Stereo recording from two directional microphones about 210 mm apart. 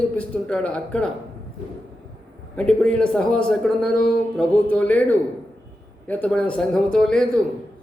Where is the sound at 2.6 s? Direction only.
5° left (ahead or behind).